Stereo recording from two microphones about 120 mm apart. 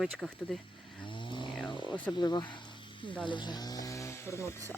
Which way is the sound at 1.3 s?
40° left (ahead or behind).